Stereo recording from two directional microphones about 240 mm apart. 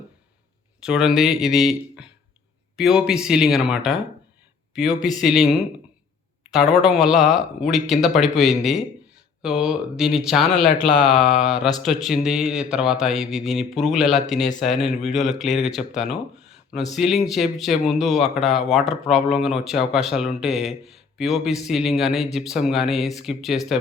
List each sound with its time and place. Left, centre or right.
0.8 s speech: centre